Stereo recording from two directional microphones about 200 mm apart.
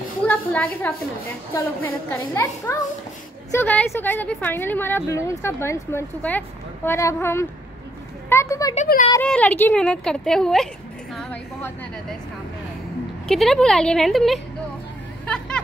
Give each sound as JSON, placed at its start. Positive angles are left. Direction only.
{"t": 0.3, "sound": "speech", "side_deg": 10}
{"t": 8.3, "sound": "a sound", "side_deg": 15}
{"t": 8.7, "sound": "speech", "side_deg": 40}
{"t": 9.2, "sound": "a woman's voice", "side_deg": 5}
{"t": 13.3, "sound": "speech", "side_deg": 0}
{"t": 15.2, "sound": "vehicle", "side_deg": 5}